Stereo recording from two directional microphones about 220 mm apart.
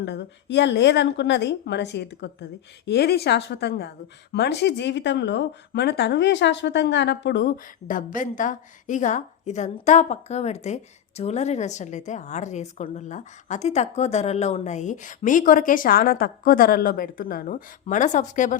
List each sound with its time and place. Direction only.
0.0 s a woman's voice: 50° left (ahead or behind); by 18.6 s 35° left (ahead or behind)